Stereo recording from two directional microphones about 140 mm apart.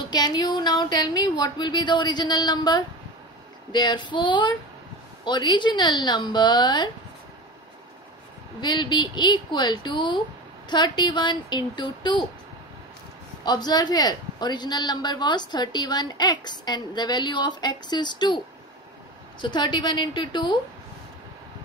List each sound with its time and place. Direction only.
0.1 s a man's voice: 30° left (ahead or behind)
8.5 s a man's voice: 35° left (ahead or behind)
13.4 s a man's voice: 30° left (ahead or behind)
19.4 s a man's voice: 35° left (ahead or behind)